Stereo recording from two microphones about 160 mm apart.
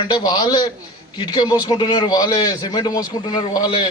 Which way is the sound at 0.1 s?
25° left (ahead or behind).